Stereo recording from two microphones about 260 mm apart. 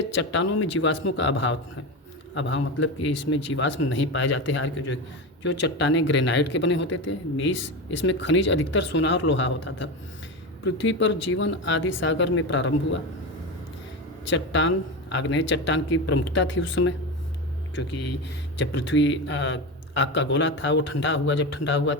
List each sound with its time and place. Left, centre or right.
0.1 s speech: left
14.3 s speech: left
18.5 s speech: left